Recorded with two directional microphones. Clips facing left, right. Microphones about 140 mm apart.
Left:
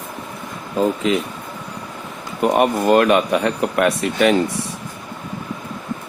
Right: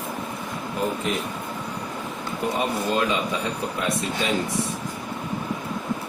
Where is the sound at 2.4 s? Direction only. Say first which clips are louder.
Left 10 dB; 65° left (ahead or behind).